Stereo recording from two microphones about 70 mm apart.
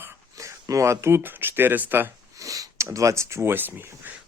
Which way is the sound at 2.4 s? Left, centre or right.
Right.